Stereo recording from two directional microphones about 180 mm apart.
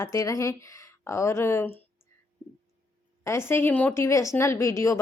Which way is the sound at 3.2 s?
15° left (ahead or behind).